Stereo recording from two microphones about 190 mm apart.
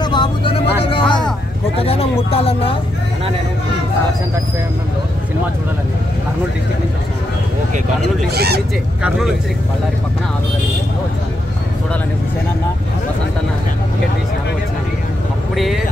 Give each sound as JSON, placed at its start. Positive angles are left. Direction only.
{"t": 0.0, "sound": "vehicle", "side_deg": 25}
{"t": 1.8, "sound": "speech", "side_deg": 30}
{"t": 8.3, "sound": "speech", "side_deg": -55}
{"t": 15.5, "sound": "speech", "side_deg": 0}